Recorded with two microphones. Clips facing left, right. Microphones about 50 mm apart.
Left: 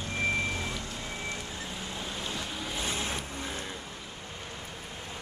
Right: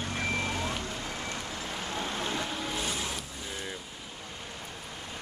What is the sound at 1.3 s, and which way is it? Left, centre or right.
Waves, right.